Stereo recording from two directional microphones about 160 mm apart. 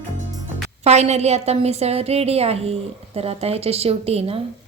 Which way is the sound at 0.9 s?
45° right (ahead or behind).